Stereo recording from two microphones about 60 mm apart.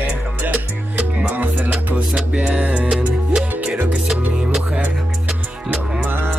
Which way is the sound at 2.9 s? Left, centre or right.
Centre.